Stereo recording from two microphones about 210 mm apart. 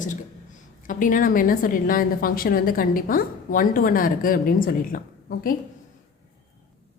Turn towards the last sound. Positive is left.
turn(degrees=45)  # may be behind; listen again after turning